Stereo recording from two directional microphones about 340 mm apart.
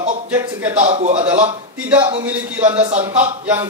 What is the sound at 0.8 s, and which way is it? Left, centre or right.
Speech, centre.